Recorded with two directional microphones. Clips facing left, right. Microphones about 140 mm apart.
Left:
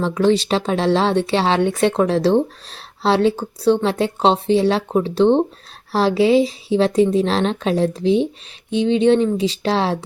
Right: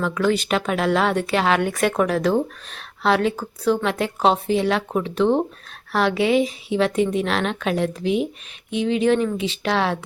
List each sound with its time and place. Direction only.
0.0 s speech: 30° left (ahead or behind)